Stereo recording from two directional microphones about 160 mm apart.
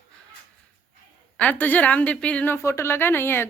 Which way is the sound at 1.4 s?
10° left (ahead or behind).